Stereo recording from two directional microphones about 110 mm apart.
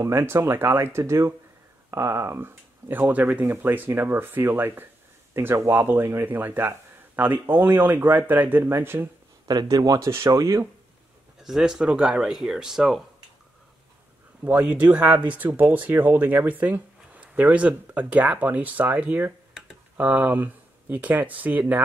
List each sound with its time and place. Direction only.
0.0 s speech: 25° right (ahead or behind)
9.5 s speech: 35° right (ahead or behind)
11.4 s speech: 5° right (ahead or behind)
14.4 s speech: 15° right (ahead or behind)